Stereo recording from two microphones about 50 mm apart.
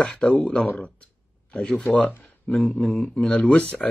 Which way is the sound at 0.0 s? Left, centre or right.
Left.